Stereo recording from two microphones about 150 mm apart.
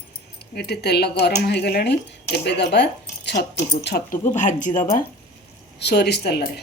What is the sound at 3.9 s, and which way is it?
Speech, 60° left (ahead or behind).